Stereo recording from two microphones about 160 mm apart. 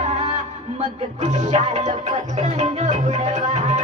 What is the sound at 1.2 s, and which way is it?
Music, 45° right (ahead or behind).